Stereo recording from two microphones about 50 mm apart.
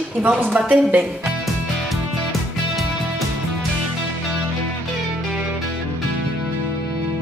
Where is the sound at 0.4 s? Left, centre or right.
Right.